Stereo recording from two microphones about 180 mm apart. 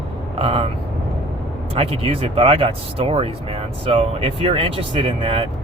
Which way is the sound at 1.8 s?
35° right (ahead or behind).